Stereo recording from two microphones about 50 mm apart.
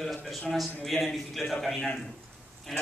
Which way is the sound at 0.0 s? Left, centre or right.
Centre.